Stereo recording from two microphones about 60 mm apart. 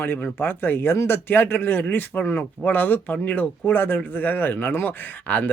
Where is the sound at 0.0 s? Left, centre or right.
Left.